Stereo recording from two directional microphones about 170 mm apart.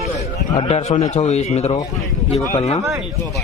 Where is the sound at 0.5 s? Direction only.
40° left (ahead or behind).